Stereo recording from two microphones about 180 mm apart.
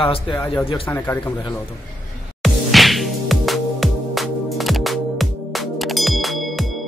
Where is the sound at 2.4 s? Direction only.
Centre (ahead or behind).